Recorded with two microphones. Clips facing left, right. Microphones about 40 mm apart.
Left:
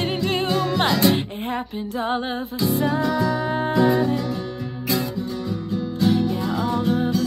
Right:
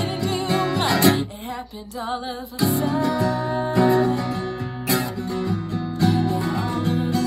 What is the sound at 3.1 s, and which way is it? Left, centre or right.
Music, right.